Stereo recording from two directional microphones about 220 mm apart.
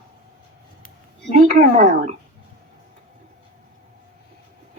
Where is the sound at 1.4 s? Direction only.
35° right (ahead or behind).